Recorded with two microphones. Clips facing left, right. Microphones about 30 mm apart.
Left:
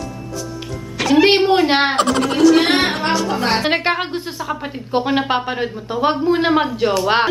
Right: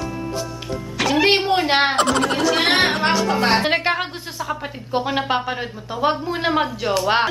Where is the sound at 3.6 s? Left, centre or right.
Centre.